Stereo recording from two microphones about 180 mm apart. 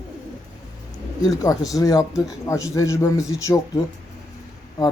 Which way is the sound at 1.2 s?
20° left (ahead or behind).